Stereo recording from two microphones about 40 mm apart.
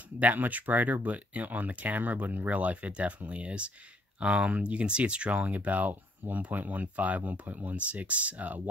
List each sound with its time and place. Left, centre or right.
0.2 s speech: right